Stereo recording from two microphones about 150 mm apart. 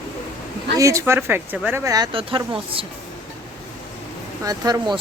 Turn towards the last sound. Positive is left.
turn(degrees=-30)  # may be behind; listen again after turning